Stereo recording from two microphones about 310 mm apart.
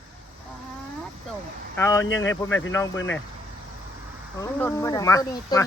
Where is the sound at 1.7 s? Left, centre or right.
Centre.